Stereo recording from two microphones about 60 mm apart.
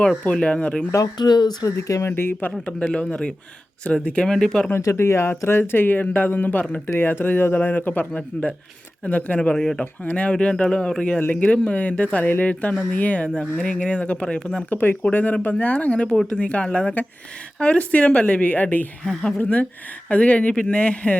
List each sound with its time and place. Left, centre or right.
0.3 s speech: centre
1.5 s speech: left
2.0 s speech: left
2.9 s speech: centre
4.8 s speech: left; by 9.8 s centre
9.8 s speech: left
11.2 s speech: left
14.7 s speech: left